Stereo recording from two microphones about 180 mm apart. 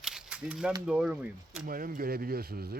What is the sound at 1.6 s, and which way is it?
Speech, 50° right (ahead or behind).